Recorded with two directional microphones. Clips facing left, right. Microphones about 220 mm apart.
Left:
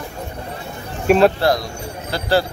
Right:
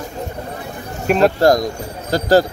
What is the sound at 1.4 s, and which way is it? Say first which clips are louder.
Speech: right 5 dB; 45° right (ahead or behind).